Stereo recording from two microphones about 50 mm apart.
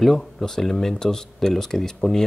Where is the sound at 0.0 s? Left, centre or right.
Centre.